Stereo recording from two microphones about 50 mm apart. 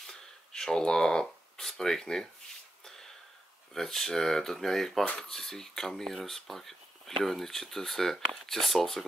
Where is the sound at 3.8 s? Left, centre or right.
Centre.